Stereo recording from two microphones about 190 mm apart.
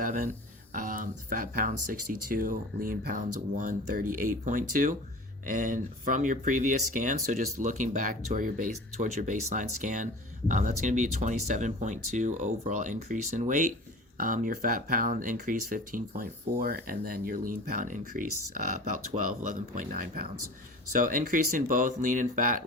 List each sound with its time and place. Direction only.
0.0 s speech: 45° right (ahead or behind)